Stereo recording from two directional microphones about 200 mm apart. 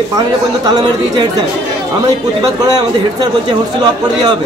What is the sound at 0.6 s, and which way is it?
Speech, 20° right (ahead or behind).